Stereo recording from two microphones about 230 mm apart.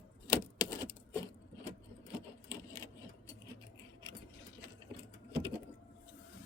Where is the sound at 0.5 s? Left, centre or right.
Centre.